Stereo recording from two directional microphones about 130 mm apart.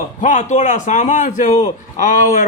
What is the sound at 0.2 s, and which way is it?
Speech, 70° left (ahead or behind).